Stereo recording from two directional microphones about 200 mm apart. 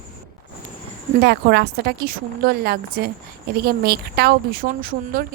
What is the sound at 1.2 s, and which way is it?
Speech, 55° right (ahead or behind).